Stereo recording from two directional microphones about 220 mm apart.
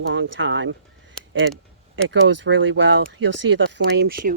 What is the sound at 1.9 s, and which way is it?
Speech, 55° right (ahead or behind).